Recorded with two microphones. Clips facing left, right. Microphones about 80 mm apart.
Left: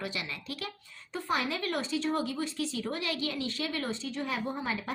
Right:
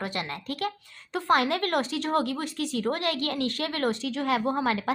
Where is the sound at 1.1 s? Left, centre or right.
Right.